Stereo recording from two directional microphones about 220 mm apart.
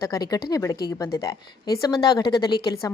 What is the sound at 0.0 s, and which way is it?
A woman's voice, 15° left (ahead or behind).